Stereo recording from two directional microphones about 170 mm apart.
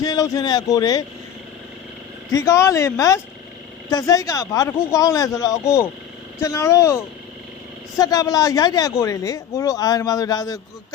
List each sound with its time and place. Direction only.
0.0 s speech: 20° left (ahead or behind)
2.3 s speech: 15° left (ahead or behind)